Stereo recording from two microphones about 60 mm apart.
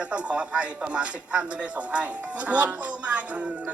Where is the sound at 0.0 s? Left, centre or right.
Centre.